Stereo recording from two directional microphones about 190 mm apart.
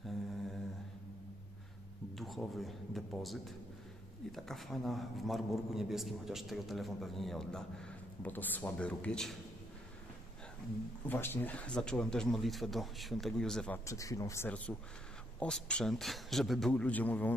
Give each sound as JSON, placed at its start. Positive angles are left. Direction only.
{"t": 2.1, "sound": "a man's voice", "side_deg": 0}
{"t": 11.1, "sound": "a man's voice", "side_deg": 10}
{"t": 13.8, "sound": "a man's voice", "side_deg": 15}